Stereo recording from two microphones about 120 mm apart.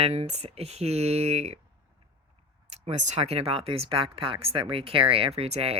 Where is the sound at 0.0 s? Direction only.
60° right (ahead or behind).